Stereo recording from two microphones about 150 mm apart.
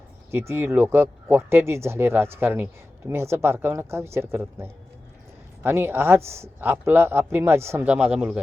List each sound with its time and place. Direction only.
0.3 s a man's voice: 15° right (ahead or behind)